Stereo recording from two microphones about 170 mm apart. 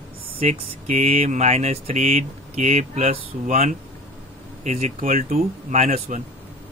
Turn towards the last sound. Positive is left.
turn(degrees=-45)  # may be behind; listen again after turning